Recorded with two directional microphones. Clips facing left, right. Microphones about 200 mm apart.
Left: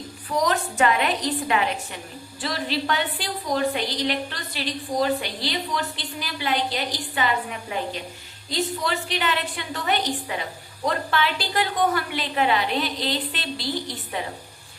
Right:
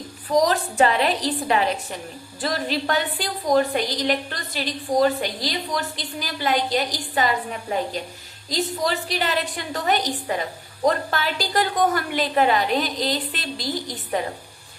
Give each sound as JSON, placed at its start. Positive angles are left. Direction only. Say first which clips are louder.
{"t": 0.4, "sound": "a woman's voice", "louder": "right 2 dB", "side_deg": -35}